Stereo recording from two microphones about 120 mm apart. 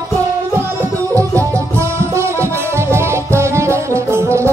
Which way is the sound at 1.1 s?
25° right (ahead or behind).